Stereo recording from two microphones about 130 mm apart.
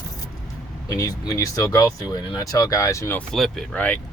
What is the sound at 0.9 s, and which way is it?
Speech, 25° left (ahead or behind).